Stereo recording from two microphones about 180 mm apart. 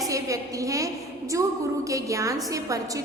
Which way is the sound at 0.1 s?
20° right (ahead or behind).